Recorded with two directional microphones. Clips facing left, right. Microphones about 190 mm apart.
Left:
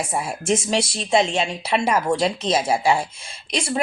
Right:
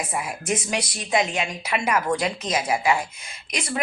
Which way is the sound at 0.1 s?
30° left (ahead or behind).